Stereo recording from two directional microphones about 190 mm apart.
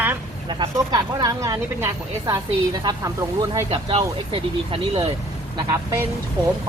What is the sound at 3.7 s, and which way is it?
Speech, 30° right (ahead or behind).